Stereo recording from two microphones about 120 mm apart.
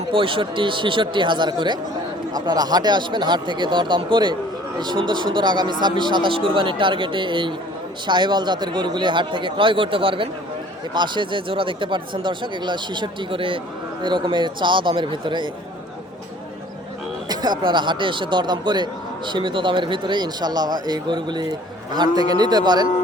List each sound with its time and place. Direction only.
0.1 s speech: 45° right (ahead or behind)
17.2 s speech: 35° right (ahead or behind)